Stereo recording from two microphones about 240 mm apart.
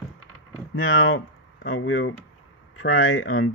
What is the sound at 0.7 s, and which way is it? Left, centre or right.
Speech, left.